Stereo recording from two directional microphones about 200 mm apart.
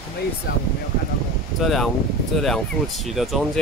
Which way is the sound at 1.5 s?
Centre (ahead or behind).